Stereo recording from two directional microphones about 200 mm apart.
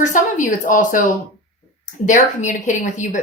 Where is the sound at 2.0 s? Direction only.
40° left (ahead or behind).